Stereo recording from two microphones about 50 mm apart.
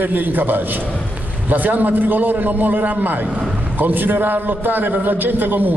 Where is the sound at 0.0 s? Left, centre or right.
Right.